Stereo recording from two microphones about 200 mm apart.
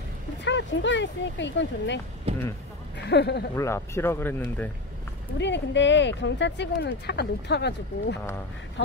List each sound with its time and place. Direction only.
0.5 s speech: 65° left (ahead or behind)
2.3 s speech: 30° right (ahead or behind)
3.0 s speech: 55° left (ahead or behind)
3.5 s speech: 15° left (ahead or behind)
5.4 s speech: 60° left (ahead or behind)